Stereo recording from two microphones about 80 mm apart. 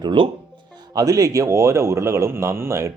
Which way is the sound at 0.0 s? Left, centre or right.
Right.